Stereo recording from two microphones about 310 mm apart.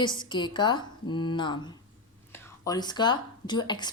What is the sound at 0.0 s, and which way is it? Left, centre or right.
A woman's voice, centre.